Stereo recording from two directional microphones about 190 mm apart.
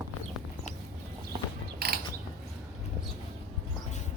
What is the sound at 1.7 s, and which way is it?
Mechanisms, 55° right (ahead or behind).